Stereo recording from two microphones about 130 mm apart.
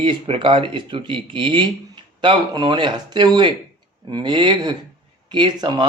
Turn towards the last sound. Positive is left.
turn(degrees=-35)  # may be behind; listen again after turning